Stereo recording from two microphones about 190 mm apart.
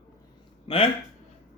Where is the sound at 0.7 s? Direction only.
25° left (ahead or behind).